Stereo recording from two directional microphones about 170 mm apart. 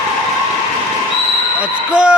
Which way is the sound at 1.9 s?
5° right (ahead or behind).